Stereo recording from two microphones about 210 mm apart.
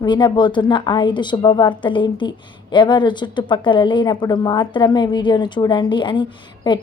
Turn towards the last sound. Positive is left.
turn(degrees=20)  # may be behind; listen again after turning